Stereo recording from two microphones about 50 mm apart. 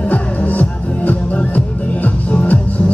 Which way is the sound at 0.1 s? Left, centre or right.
Left.